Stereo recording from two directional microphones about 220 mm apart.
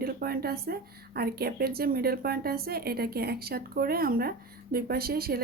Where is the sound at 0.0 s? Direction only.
45° right (ahead or behind).